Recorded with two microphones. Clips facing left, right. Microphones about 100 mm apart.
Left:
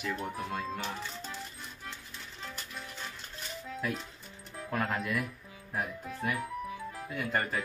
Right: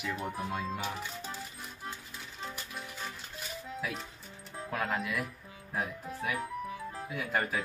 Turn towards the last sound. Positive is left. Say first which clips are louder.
# even
turn(degrees=-5)  # may be behind; listen again after turning